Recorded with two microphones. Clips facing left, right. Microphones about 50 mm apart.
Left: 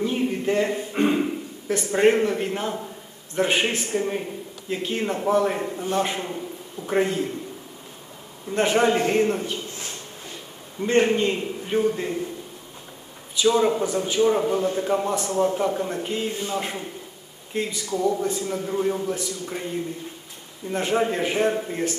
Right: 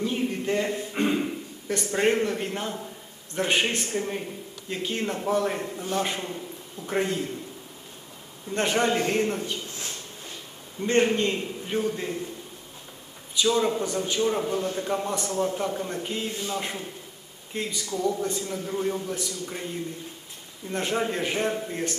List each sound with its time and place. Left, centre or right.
0.0 s a sound: centre
3.3 s a man's voice: centre
8.4 s a man's voice: centre
10.8 s a man's voice: centre
13.3 s a man's voice: centre
16.3 s a man's voice: left
16.6 s a man's voice: centre